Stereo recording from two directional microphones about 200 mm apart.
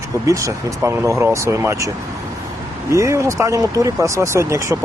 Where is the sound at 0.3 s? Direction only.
15° right (ahead or behind).